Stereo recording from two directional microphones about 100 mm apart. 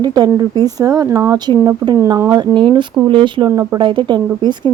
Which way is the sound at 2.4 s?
50° right (ahead or behind).